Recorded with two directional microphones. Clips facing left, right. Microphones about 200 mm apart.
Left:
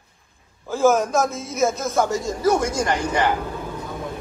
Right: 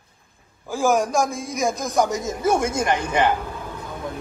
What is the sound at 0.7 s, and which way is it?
A man's voice, 15° right (ahead or behind).